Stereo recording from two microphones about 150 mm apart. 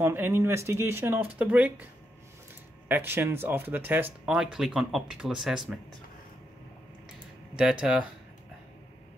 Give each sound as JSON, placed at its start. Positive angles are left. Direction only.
{"t": 0.0, "sound": "speech", "side_deg": -15}
{"t": 2.9, "sound": "speech", "side_deg": -15}
{"t": 7.8, "sound": "speech", "side_deg": -5}